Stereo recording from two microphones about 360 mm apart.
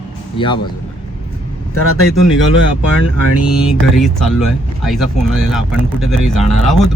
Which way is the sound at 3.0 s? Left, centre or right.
Left.